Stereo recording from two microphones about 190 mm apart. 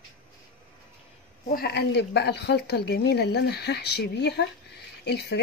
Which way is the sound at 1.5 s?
55° left (ahead or behind).